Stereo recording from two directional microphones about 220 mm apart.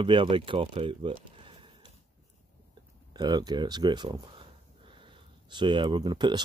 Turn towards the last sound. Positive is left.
turn(degrees=-20)  # may be behind; listen again after turning